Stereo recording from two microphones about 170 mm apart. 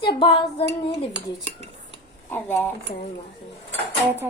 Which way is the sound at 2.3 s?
10° left (ahead or behind).